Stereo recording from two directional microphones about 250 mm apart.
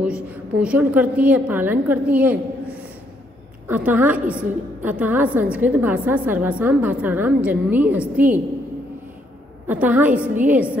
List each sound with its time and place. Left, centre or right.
0.0 s a woman's voice: centre
3.6 s a woman's voice: centre
9.7 s a woman's voice: centre